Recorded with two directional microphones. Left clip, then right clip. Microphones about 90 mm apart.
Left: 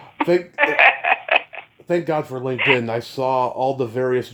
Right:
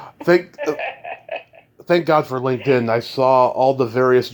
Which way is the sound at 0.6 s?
50° left (ahead or behind).